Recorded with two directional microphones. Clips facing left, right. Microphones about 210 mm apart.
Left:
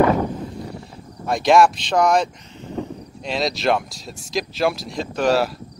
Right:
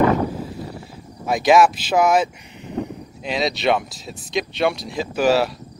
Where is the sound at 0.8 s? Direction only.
5° right (ahead or behind).